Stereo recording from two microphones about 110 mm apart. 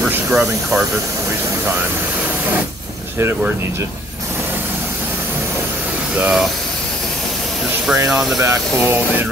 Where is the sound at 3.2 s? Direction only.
25° right (ahead or behind).